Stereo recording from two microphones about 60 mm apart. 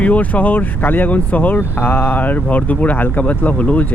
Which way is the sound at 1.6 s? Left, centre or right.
Left.